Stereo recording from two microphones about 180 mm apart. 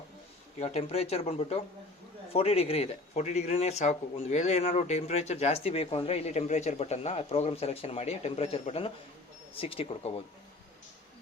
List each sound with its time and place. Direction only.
0.6 s speech: 35° left (ahead or behind)